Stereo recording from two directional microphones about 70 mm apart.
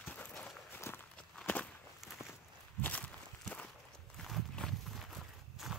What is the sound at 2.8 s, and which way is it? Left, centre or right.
Walk, centre.